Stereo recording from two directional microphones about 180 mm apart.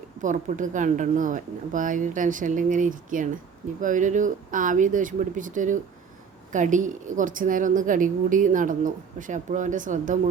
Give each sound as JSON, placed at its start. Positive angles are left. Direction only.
{"t": 0.2, "sound": "a woman's voice", "side_deg": -45}